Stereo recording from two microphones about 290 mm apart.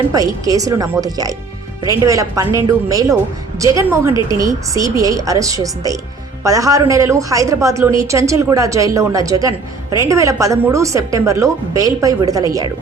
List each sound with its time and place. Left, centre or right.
0.1 s a woman's voice: centre